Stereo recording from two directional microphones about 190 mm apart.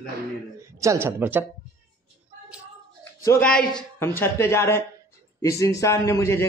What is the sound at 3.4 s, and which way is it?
Speech, 5° left (ahead or behind).